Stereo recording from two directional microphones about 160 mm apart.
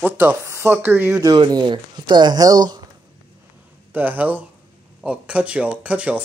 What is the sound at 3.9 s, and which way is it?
Speech, 10° right (ahead or behind).